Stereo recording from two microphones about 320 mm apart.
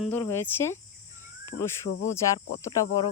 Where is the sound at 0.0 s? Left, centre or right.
Centre.